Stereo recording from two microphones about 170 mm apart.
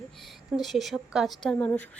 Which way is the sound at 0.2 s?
Centre (ahead or behind).